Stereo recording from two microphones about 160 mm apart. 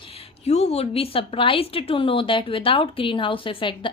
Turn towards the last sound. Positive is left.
turn(degrees=30)  # may be behind; listen again after turning